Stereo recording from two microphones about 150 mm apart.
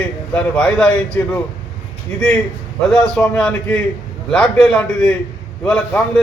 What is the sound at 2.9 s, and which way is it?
A man's voice, 5° left (ahead or behind).